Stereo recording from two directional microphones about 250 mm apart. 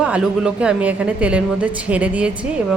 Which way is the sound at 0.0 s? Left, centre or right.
Centre.